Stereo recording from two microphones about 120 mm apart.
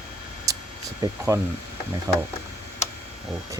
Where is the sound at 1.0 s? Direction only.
25° right (ahead or behind).